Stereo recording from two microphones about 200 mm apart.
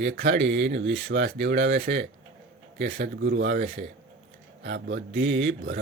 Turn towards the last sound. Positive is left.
turn(degrees=-65)  # may be behind; listen again after turning